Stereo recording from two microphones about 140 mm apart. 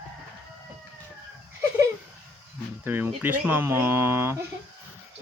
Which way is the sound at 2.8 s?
15° right (ahead or behind).